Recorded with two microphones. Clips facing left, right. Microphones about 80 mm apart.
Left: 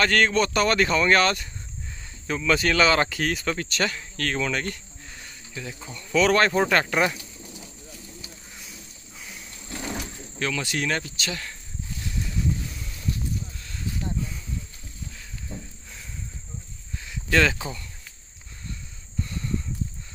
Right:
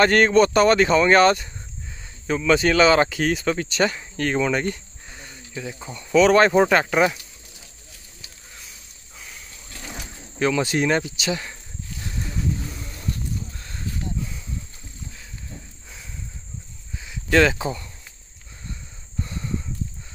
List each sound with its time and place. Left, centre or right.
0.4 s cricket: right
0.7 s speech: centre
1.2 s cricket: right
2.2 s speech: centre
3.7 s speech: centre
9.8 s cricket: centre
10.4 s cricket: right
13.6 s a sound: right
17.0 s cricket: centre
17.6 s cricket: right
19.2 s a sound: right